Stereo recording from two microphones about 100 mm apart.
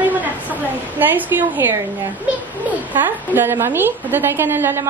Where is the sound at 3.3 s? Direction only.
25° right (ahead or behind).